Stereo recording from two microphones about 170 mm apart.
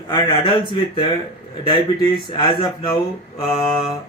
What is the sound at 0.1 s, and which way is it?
Speech, 30° left (ahead or behind).